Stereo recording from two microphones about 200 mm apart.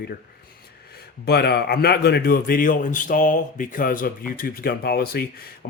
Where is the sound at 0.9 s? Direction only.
50° left (ahead or behind).